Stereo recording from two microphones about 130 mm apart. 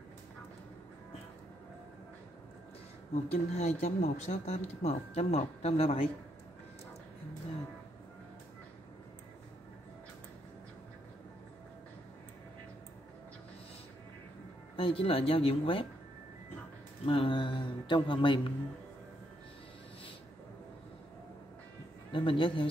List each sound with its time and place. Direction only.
3.3 s speech: 55° left (ahead or behind)
14.8 s speech: 45° left (ahead or behind)
17.0 s speech: 45° left (ahead or behind)
22.1 s speech: 40° left (ahead or behind)